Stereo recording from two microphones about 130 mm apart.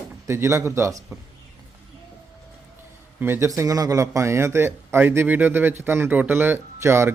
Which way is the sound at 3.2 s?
15° right (ahead or behind).